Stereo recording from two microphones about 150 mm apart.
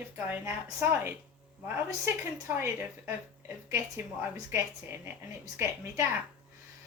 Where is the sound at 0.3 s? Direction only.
15° right (ahead or behind).